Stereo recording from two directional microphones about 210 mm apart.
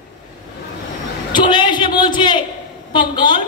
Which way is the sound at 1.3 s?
20° left (ahead or behind).